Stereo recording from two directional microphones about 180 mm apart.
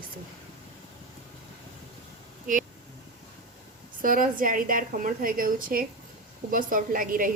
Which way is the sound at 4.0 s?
50° right (ahead or behind).